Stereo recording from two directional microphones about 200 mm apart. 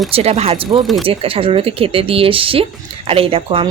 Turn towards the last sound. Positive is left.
turn(degrees=-30)  # may be behind; listen again after turning